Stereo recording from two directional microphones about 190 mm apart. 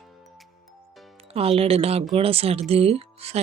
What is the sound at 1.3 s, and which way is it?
Speech, 30° right (ahead or behind).